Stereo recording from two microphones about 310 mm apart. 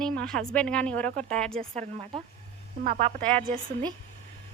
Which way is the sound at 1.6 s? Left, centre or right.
Right.